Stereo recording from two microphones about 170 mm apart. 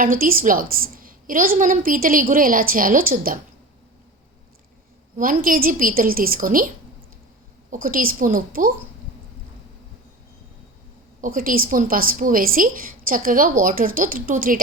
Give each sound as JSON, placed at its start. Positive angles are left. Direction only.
{"t": 0.0, "sound": "a woman's voice", "side_deg": -55}
{"t": 5.1, "sound": "a woman's voice", "side_deg": -55}
{"t": 7.7, "sound": "a woman's voice", "side_deg": -55}
{"t": 11.2, "sound": "a woman's voice", "side_deg": -55}